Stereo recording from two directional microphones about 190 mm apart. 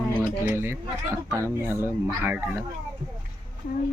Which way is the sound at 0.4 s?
15° right (ahead or behind).